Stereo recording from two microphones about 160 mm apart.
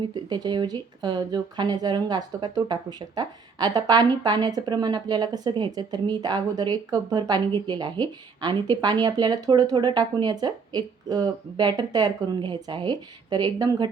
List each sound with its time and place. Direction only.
0.1 s a woman's voice: 25° right (ahead or behind)